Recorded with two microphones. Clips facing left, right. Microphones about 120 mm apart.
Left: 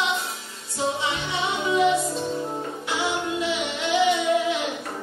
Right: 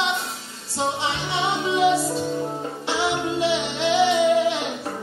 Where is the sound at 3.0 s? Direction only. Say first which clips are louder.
Right 4 dB; 30° right (ahead or behind).